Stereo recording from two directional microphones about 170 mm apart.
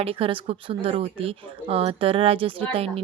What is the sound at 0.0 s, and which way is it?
A woman's voice, 35° right (ahead or behind).